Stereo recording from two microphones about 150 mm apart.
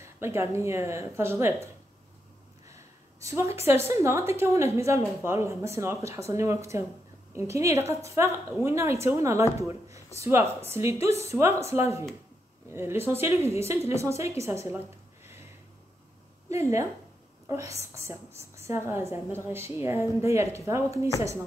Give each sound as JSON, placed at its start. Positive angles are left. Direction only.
{"t": 0.0, "sound": "a woman's voice", "side_deg": -20}
{"t": 2.7, "sound": "a sound", "side_deg": -20}
{"t": 3.6, "sound": "a woman's voice", "side_deg": -15}
{"t": 16.4, "sound": "a woman's voice", "side_deg": -20}